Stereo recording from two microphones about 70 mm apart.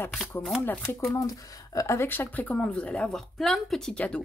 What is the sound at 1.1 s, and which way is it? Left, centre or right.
Speech, left.